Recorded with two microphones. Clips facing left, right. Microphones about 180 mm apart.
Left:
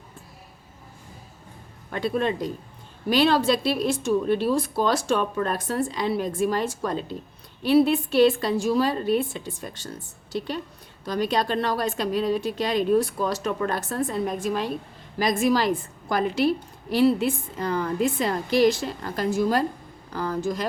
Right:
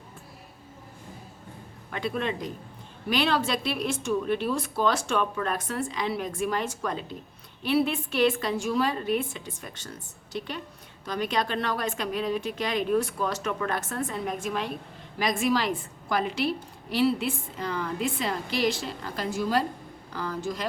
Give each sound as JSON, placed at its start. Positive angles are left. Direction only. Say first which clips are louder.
{"t": 1.9, "sound": "a woman's voice", "louder": "left 5 dB", "side_deg": 40}